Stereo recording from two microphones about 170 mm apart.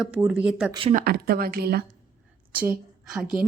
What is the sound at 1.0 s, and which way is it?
Speech, 65° right (ahead or behind).